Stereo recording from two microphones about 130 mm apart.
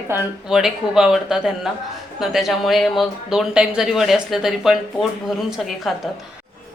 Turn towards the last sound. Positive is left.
turn(degrees=0)  # may be behind; listen again after turning